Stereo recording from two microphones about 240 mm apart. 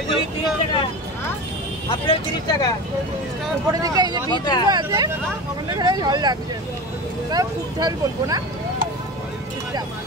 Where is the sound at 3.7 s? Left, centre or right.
Centre.